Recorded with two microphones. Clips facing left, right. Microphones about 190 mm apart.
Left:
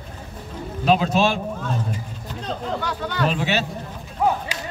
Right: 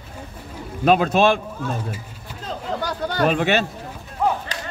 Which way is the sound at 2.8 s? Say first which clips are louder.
Right 2 dB; 40° right (ahead or behind).